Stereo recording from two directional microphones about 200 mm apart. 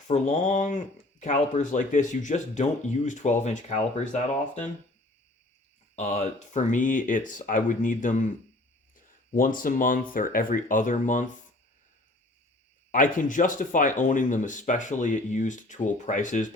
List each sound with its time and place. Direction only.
0.1 s speech: 35° left (ahead or behind)
6.0 s speech: 35° left (ahead or behind)
12.9 s speech: 40° left (ahead or behind)